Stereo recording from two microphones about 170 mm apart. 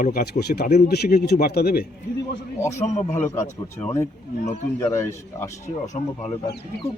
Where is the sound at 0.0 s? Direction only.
65° left (ahead or behind).